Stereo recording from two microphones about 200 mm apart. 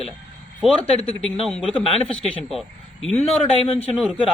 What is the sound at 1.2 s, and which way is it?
A man's voice, 5° left (ahead or behind).